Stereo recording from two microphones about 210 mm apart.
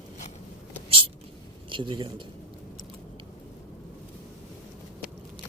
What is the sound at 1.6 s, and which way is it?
Speech, 25° right (ahead or behind).